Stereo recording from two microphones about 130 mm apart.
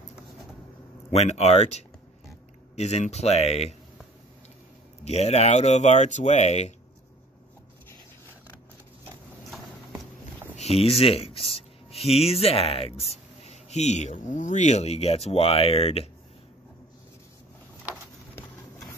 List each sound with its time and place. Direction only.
1.1 s speech: 60° left (ahead or behind)
5.0 s speech: 55° left (ahead or behind)
10.5 s speech: 55° left (ahead or behind)